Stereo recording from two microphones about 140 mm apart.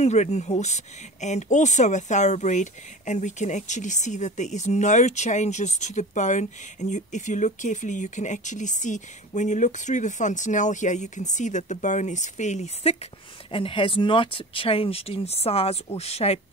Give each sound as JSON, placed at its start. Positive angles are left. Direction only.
{"t": 0.0, "sound": "speech", "side_deg": 55}